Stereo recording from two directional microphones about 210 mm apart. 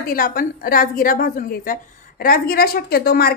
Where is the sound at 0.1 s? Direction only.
45° left (ahead or behind).